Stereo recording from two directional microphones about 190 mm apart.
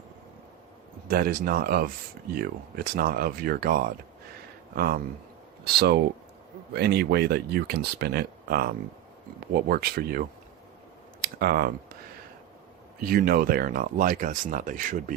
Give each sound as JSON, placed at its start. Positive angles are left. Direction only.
{"t": 1.0, "sound": "speech", "side_deg": -50}
{"t": 13.0, "sound": "speech", "side_deg": -50}